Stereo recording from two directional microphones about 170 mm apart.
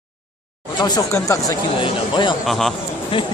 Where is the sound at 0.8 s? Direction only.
25° left (ahead or behind).